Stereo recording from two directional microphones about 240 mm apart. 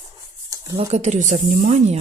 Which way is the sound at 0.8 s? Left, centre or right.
Right.